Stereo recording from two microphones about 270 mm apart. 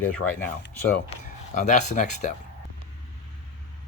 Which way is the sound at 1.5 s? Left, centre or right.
Left.